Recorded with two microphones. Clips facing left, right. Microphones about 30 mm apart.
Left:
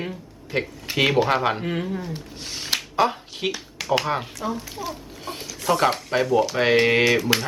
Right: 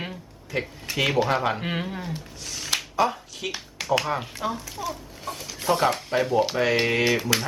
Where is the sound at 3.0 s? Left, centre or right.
Left.